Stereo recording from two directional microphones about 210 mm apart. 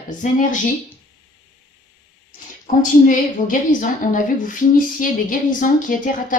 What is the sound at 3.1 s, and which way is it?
A woman's voice, 40° left (ahead or behind).